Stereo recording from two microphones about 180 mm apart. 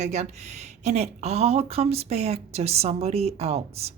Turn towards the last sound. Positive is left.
turn(degrees=-35)  # may be behind; listen again after turning